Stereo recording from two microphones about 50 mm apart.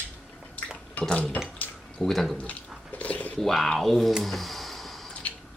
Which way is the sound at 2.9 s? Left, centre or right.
Left.